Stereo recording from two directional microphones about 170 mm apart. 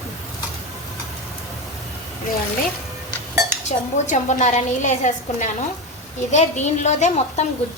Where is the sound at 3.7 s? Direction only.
45° left (ahead or behind).